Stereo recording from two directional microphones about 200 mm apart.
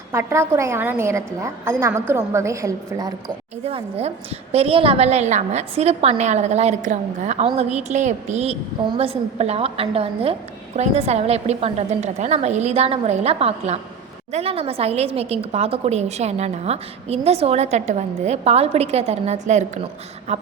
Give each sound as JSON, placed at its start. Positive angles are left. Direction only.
{"t": 0.1, "sound": "a woman's voice", "side_deg": -15}
{"t": 3.6, "sound": "a woman's voice", "side_deg": -30}